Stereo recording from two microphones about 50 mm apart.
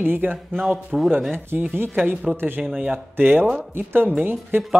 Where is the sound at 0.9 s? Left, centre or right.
Centre.